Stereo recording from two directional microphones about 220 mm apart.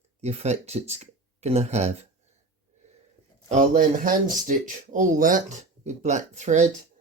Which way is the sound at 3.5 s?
35° right (ahead or behind).